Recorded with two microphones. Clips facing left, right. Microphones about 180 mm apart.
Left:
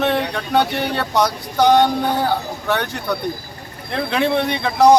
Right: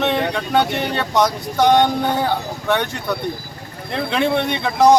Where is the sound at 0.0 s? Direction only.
Centre (ahead or behind).